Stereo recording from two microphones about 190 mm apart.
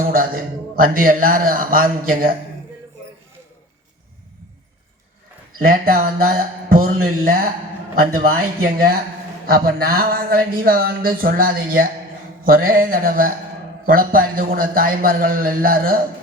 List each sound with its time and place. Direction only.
0.0 s speech: 50° right (ahead or behind)
5.6 s speech: 50° right (ahead or behind)
8.1 s speech: 50° right (ahead or behind)